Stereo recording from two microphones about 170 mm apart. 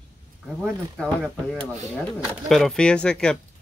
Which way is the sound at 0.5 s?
5° right (ahead or behind).